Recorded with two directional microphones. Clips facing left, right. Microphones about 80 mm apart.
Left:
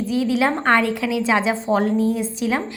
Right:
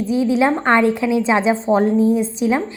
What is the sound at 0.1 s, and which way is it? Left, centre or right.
A woman's voice, right.